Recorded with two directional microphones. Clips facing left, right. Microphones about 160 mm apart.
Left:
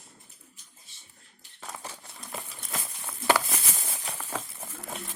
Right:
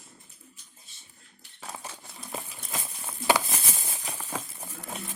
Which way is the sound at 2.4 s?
15° right (ahead or behind).